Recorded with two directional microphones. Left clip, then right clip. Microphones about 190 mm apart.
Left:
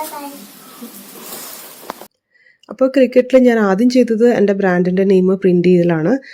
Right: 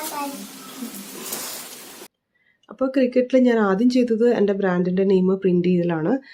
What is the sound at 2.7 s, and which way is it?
Speech, 25° left (ahead or behind).